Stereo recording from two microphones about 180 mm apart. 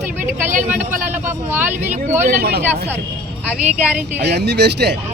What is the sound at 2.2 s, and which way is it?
Speech, 55° right (ahead or behind).